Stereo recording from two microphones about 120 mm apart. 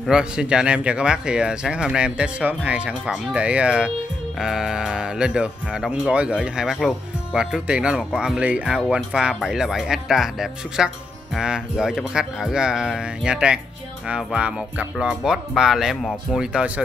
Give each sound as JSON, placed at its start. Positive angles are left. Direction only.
{"t": 0.0, "sound": "speech", "side_deg": -5}
{"t": 16.3, "sound": "speech", "side_deg": -10}